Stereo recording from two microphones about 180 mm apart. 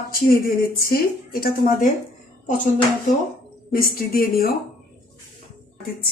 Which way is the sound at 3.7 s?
55° left (ahead or behind).